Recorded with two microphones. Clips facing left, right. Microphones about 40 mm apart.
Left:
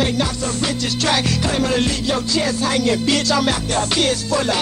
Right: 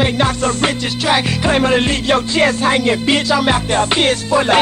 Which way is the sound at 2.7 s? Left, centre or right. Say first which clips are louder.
Right 3 dB; right.